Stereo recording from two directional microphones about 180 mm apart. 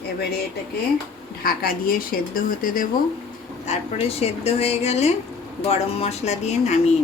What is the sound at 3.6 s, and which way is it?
Speech, 35° left (ahead or behind).